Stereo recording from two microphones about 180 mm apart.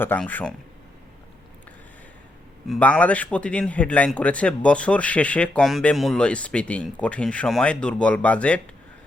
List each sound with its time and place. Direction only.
0.0 s a man's voice: 10° left (ahead or behind)
2.6 s a man's voice: 5° left (ahead or behind)